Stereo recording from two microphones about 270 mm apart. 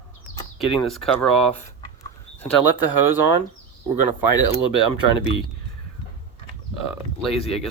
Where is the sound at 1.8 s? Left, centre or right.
Centre.